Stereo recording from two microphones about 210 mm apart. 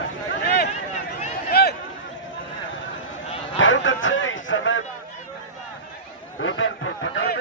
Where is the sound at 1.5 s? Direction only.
50° left (ahead or behind).